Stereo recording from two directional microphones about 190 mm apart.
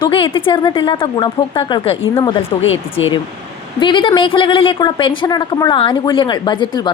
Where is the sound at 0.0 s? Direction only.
25° left (ahead or behind).